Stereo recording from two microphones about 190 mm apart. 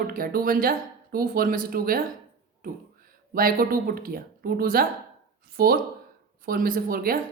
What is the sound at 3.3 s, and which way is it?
Speech, 50° right (ahead or behind).